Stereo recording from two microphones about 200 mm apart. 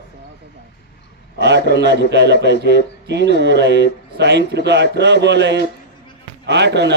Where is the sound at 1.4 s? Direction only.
60° right (ahead or behind).